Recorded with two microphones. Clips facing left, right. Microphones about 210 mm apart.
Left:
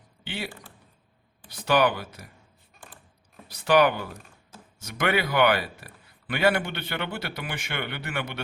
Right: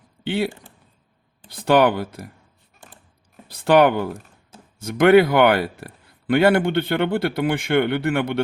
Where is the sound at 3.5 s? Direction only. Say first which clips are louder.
Right 5 dB; 55° right (ahead or behind).